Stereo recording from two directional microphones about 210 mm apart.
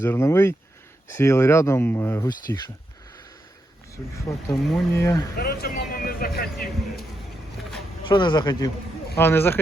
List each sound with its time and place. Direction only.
0.0 s speech: 10° left (ahead or behind)
3.9 s speech: 15° left (ahead or behind)
5.4 s speech: 45° left (ahead or behind)
8.0 s speech: 20° left (ahead or behind)